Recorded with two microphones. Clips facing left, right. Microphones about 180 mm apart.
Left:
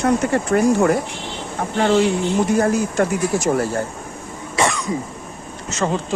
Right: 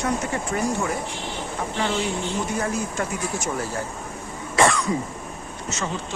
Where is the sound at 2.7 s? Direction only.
75° left (ahead or behind).